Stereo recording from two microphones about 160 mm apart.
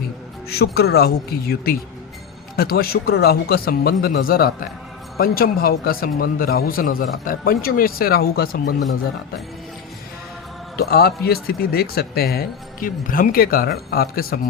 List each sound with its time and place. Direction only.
0.5 s a man's voice: 75° left (ahead or behind)
10.8 s a man's voice: 75° left (ahead or behind)